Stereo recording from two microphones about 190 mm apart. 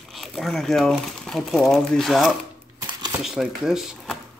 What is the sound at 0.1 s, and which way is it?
Speech, centre (ahead or behind).